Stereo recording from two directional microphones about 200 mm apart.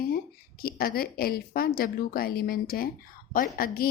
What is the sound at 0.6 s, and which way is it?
Speech, 50° left (ahead or behind).